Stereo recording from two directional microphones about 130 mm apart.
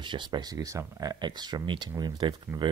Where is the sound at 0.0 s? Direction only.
35° right (ahead or behind).